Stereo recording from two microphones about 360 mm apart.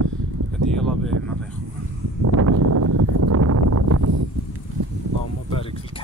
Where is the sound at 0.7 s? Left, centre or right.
Centre.